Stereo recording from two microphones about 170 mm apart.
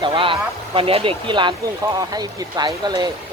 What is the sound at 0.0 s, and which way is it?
Speech, 30° right (ahead or behind).